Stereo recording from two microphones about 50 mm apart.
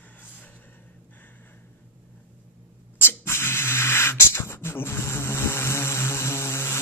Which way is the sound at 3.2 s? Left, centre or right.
Left.